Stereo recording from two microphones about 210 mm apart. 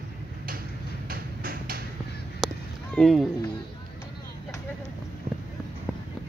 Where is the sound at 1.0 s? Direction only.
45° right (ahead or behind).